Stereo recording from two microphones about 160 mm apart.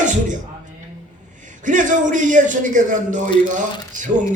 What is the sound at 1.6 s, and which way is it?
A man's voice, 50° right (ahead or behind).